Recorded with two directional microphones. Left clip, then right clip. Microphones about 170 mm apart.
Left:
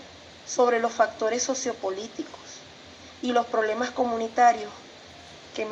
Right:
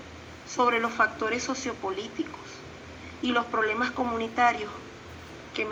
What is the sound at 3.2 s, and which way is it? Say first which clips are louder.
A woman's voice: left 2 dB; 30° left (ahead or behind).